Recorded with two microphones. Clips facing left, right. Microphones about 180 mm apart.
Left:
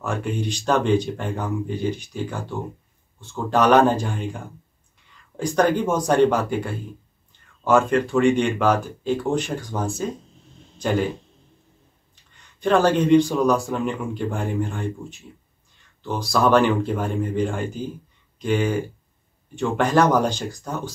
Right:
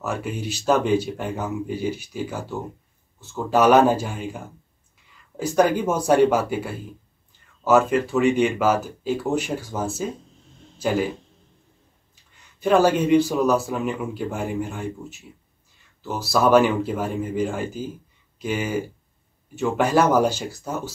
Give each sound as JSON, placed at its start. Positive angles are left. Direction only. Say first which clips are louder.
{"t": 0.0, "sound": "speech", "louder": "left 2 dB", "side_deg": -5}
{"t": 5.4, "sound": "speech", "louder": "even", "side_deg": -10}
{"t": 12.5, "sound": "speech", "louder": "even", "side_deg": -10}